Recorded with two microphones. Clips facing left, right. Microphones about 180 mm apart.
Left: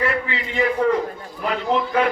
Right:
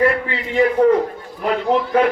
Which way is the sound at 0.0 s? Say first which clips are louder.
Right 5 dB; 45° right (ahead or behind).